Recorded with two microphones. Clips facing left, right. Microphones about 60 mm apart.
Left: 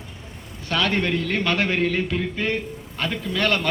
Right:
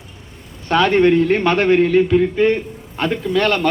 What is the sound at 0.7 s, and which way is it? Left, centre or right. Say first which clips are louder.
A man's voice: right 9 dB; right.